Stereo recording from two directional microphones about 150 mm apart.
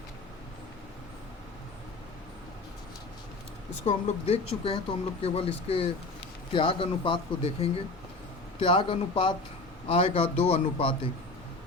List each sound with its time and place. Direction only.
3.8 s speech: 45° left (ahead or behind)